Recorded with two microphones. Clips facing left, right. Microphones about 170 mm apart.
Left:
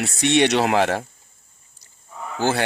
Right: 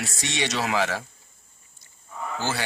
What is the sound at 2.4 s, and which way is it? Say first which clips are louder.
Speech: left 9 dB; 55° left (ahead or behind).